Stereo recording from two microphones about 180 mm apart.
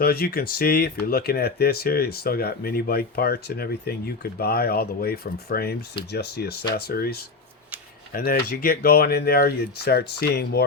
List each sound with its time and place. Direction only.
0.0 s speech: 60° left (ahead or behind)